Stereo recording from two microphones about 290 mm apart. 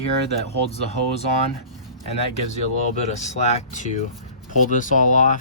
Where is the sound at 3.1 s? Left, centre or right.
Left.